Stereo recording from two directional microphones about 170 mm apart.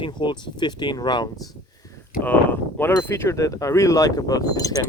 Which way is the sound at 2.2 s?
10° left (ahead or behind).